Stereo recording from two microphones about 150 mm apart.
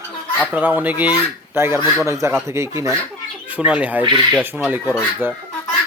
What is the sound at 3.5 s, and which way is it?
Speech, 10° right (ahead or behind).